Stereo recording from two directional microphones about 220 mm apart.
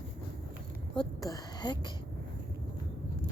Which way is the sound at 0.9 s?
20° left (ahead or behind).